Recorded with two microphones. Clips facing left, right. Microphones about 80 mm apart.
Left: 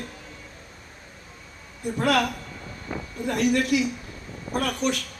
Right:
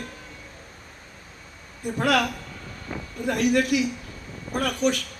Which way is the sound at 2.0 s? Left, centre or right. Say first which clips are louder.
Even; left.